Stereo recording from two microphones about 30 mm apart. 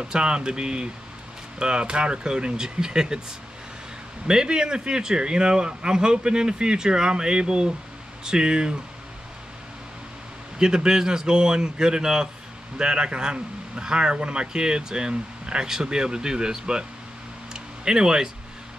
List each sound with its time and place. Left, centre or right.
0.0 s speech: right
4.3 s speech: right
10.6 s speech: right
17.5 s a sound: right